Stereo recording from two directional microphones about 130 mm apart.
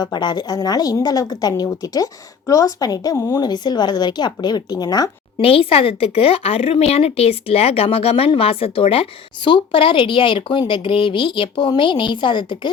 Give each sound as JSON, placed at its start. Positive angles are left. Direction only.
{"t": 0.0, "sound": "a woman's voice", "side_deg": 35}
{"t": 5.4, "sound": "speech", "side_deg": 45}